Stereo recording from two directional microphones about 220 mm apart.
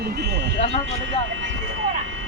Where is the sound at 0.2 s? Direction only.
50° right (ahead or behind).